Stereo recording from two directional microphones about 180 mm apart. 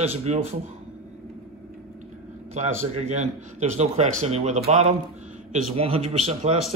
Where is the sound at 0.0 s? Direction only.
35° right (ahead or behind).